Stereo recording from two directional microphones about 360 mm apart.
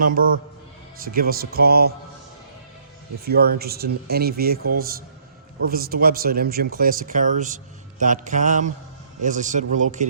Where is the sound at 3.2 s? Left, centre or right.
Right.